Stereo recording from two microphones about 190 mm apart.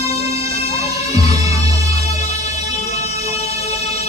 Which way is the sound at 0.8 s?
35° left (ahead or behind).